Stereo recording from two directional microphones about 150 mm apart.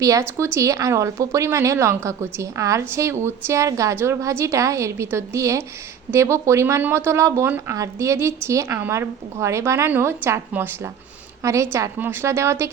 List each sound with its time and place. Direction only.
0.0 s a woman's voice: 20° right (ahead or behind)